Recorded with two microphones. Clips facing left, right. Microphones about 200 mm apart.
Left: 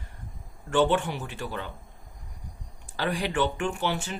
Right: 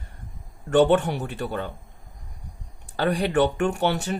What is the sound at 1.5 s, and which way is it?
Speech, 45° right (ahead or behind).